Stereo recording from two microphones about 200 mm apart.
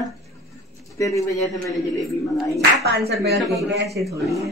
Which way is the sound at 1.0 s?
15° left (ahead or behind).